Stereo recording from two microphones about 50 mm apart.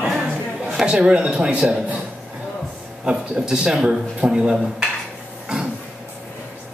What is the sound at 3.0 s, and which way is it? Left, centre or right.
Speech, centre.